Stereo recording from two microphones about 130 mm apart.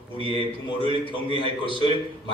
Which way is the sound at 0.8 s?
40° left (ahead or behind).